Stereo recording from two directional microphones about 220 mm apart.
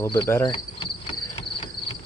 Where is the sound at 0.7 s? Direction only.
25° left (ahead or behind).